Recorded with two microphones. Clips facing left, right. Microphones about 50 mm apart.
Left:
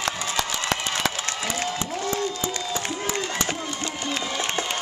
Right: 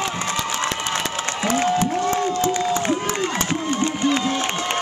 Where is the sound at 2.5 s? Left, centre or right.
Right.